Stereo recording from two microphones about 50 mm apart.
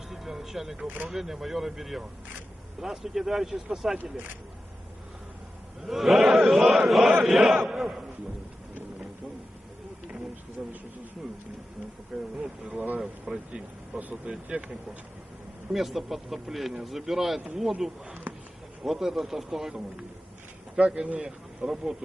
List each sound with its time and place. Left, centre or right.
0.1 s music: centre
1.0 s speech: centre
5.8 s speech: centre
10.6 s speech: right
12.4 s speech: right
15.7 s speech: centre
18.3 s a sound: right
18.8 s speech: centre
20.7 s speech: right